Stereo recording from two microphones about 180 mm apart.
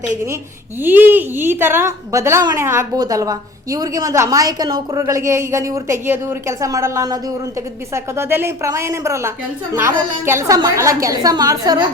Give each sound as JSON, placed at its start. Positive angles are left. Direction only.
{"t": 0.8, "sound": "a woman's voice", "side_deg": -10}